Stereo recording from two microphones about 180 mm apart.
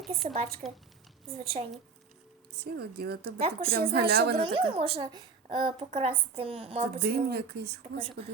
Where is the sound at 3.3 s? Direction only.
30° right (ahead or behind).